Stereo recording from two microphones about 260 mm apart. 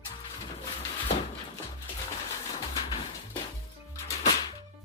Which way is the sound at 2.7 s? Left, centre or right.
Centre.